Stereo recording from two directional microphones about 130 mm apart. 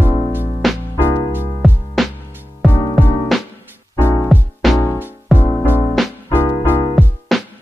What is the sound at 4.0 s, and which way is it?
Music, 15° left (ahead or behind).